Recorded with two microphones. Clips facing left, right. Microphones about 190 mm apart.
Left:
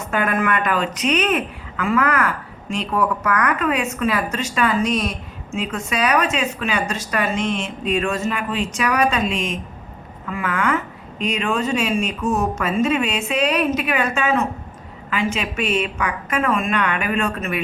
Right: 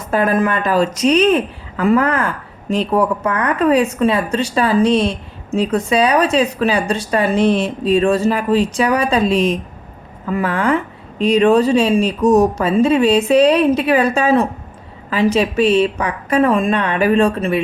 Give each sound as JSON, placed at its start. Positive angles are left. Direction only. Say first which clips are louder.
{"t": 0.1, "sound": "a woman's voice", "louder": "right 5 dB", "side_deg": -30}